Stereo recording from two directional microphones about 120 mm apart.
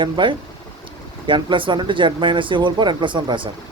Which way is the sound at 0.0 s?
40° right (ahead or behind).